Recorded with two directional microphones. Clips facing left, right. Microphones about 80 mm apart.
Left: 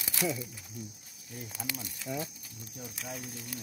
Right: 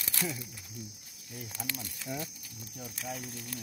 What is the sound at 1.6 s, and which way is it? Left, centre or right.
Speech, centre.